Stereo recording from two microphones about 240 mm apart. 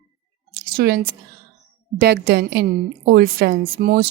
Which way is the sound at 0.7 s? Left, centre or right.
Right.